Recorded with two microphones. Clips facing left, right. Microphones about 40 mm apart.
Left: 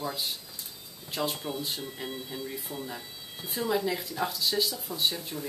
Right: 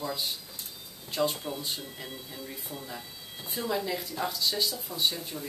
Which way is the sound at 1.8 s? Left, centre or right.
Left.